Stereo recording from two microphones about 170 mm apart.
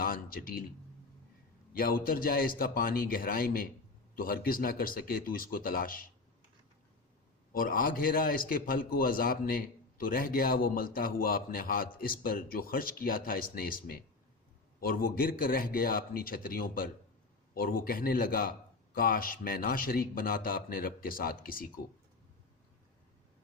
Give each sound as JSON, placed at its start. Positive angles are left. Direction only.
{"t": 0.0, "sound": "speech", "side_deg": 60}
{"t": 1.7, "sound": "a man's voice", "side_deg": 60}
{"t": 7.5, "sound": "a man's voice", "side_deg": 55}